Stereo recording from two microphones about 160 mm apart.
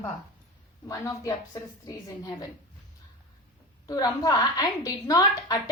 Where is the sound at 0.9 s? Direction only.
20° left (ahead or behind).